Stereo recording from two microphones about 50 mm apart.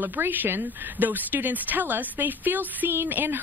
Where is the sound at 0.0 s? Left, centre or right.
Right.